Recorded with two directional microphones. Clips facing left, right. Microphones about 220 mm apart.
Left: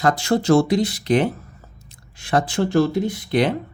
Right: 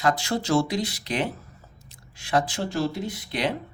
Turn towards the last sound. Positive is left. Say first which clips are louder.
# left 8 dB
turn(degrees=50)  # may be behind; listen again after turning